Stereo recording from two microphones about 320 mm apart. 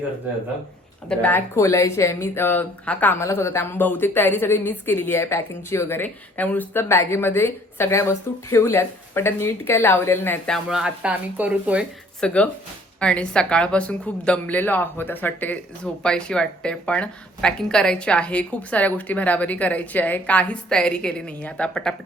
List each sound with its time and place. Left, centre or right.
1.0 s a woman's voice: centre